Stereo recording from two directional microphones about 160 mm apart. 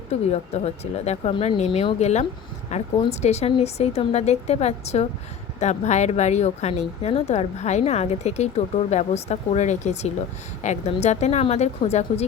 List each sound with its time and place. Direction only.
0.1 s speech: 40° left (ahead or behind)